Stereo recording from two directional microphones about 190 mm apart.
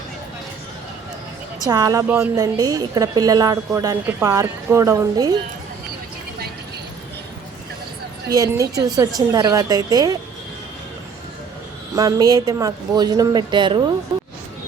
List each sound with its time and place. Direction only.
1.6 s a woman's voice: 20° right (ahead or behind)
8.3 s speech: 20° right (ahead or behind)
11.9 s speech: 20° right (ahead or behind)